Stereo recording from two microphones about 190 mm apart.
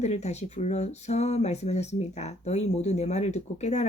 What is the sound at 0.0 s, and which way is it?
Speech, 35° left (ahead or behind).